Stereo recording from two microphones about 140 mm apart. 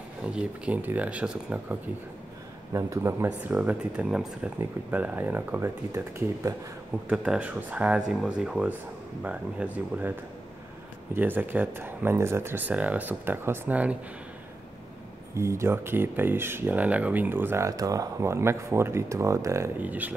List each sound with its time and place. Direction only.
0.2 s speech: 5° right (ahead or behind)
2.7 s speech: 20° right (ahead or behind)
7.1 s speech: 10° right (ahead or behind)
11.1 s speech: 15° right (ahead or behind)
15.3 s speech: 20° right (ahead or behind)